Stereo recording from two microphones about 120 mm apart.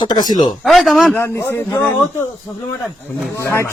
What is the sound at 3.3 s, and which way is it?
Speech, 20° left (ahead or behind).